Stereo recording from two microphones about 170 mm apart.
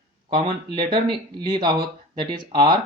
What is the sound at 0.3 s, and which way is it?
Speech, 25° right (ahead or behind).